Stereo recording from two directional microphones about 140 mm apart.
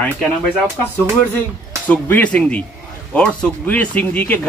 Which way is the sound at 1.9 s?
10° left (ahead or behind).